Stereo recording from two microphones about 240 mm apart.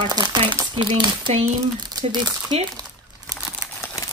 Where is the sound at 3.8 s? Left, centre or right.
Centre.